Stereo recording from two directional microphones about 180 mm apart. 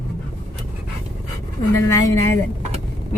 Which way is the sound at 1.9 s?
15° left (ahead or behind).